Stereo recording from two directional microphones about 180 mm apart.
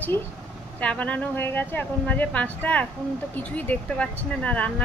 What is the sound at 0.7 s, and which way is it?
Speech, 5° left (ahead or behind).